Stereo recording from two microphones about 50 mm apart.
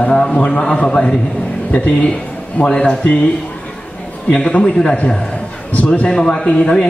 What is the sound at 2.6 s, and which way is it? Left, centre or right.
Speech, centre.